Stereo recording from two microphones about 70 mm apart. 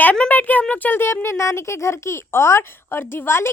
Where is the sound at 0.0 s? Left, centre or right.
Left.